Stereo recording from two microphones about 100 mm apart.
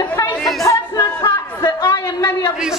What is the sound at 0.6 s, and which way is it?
Chatter, 35° left (ahead or behind).